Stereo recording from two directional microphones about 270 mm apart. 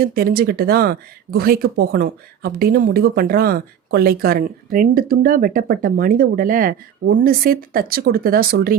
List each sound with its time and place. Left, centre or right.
0.0 s speech: right